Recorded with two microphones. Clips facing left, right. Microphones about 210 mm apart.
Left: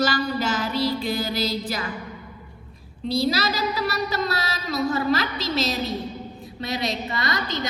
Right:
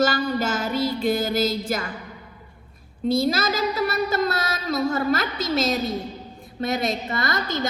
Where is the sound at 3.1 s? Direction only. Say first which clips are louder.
Right 1 dB; 50° right (ahead or behind).